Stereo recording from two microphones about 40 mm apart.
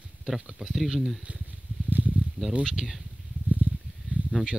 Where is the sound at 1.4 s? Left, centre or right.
Right.